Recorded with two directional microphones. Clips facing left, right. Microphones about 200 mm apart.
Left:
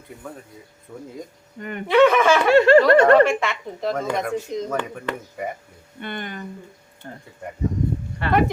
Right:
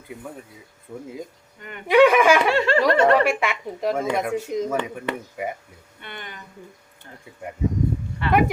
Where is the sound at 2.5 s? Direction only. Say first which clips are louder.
Left 8 dB; 45° left (ahead or behind).